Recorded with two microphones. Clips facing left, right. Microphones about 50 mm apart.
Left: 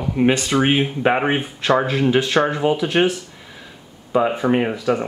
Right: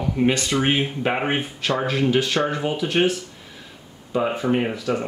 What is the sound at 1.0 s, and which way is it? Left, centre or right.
Speech, left.